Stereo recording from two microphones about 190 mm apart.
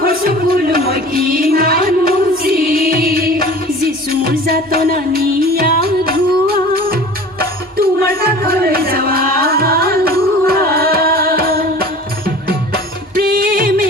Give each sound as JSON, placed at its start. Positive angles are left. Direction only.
{"t": 0.0, "sound": "music", "side_deg": -50}